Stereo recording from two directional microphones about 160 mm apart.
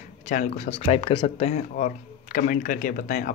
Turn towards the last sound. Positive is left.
turn(degrees=50)  # may be behind; listen again after turning